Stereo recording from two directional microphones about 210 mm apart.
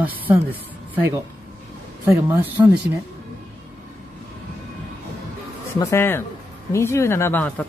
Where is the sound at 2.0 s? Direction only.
10° right (ahead or behind).